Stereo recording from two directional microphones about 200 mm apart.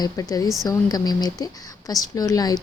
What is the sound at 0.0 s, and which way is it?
A woman's voice, 20° left (ahead or behind).